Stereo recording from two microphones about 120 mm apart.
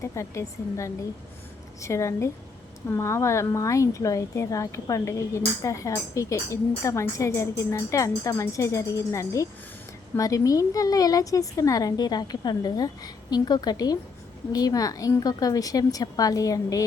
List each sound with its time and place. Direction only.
0.0 s a woman's voice: 25° left (ahead or behind)